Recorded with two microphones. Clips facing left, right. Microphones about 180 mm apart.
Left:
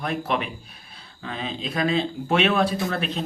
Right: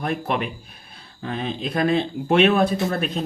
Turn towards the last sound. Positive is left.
turn(degrees=-45)  # may be behind; listen again after turning